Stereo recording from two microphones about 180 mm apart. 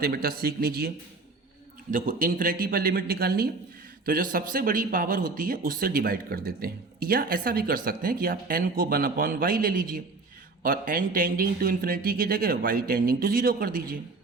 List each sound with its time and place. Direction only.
0.0 s speech: 55° right (ahead or behind)
1.9 s speech: 45° right (ahead or behind)